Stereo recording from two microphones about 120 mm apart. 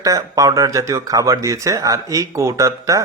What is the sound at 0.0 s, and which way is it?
Speech, 30° right (ahead or behind).